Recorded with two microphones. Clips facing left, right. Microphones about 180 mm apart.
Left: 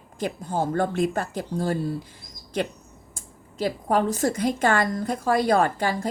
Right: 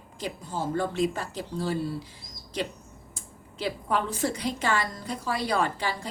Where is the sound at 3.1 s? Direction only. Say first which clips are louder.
Left 7 dB; 45° left (ahead or behind).